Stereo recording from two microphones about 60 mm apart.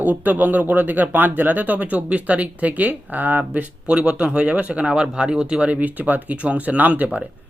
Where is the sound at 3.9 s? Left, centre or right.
Centre.